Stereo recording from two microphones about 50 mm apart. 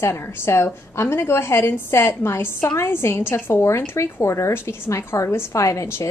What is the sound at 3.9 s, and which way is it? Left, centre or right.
A woman's voice, left.